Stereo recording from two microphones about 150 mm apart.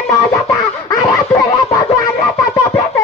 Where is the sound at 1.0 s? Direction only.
20° left (ahead or behind).